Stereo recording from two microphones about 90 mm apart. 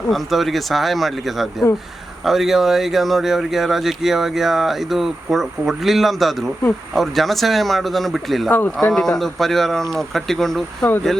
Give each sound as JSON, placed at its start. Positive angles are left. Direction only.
{"t": 0.1, "sound": "speech", "side_deg": 0}
{"t": 8.4, "sound": "speech", "side_deg": 20}
{"t": 8.8, "sound": "speech", "side_deg": 5}